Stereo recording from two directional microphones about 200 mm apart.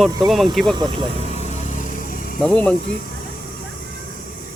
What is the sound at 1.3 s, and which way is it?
Vehicle, 35° left (ahead or behind).